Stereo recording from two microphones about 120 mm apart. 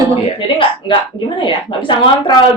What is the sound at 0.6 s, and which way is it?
Speech, 45° left (ahead or behind).